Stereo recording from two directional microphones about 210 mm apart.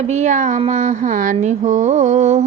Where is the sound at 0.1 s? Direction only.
35° right (ahead or behind).